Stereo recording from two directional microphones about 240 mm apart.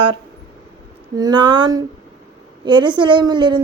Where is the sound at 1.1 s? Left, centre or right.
Centre.